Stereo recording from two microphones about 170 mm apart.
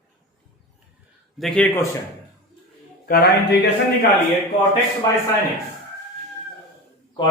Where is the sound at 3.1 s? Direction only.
65° left (ahead or behind).